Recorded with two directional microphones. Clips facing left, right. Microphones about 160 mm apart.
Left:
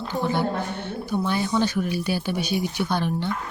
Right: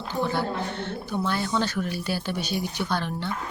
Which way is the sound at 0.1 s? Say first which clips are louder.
Left 2 dB; 15° left (ahead or behind).